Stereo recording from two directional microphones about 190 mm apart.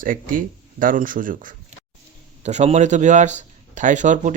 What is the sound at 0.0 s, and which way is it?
A man's voice, 45° right (ahead or behind).